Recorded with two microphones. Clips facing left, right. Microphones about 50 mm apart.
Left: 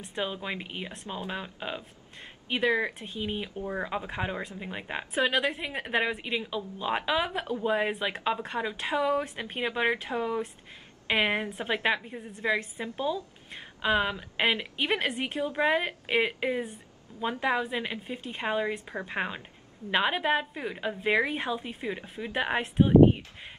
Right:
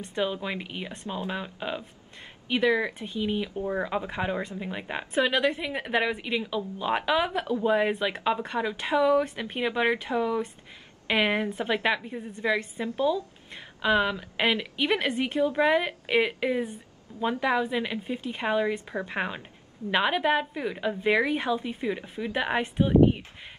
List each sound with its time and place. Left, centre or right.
0.0 s a woman's voice: centre
3.5 s a woman's voice: centre
7.2 s a woman's voice: centre
12.8 s speech: left
13.7 s a woman's voice: centre